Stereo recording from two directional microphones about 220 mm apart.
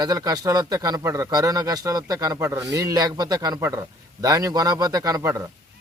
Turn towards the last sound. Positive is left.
turn(degrees=-15)  # may be behind; listen again after turning